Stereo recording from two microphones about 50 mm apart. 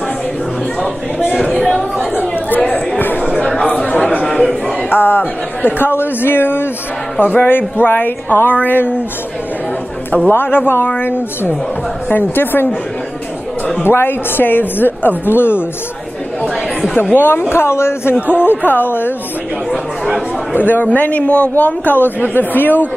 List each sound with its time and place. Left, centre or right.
1.6 s chatter: centre
2.0 s chatter: right
3.0 s a sound: left
3.5 s chatter: left
4.3 s a sound: centre
4.8 s a woman's voice: left
10.3 s a woman's voice: left
13.8 s a woman's voice: left
17.1 s speech: left
18.3 s speech: left
20.5 s speech: left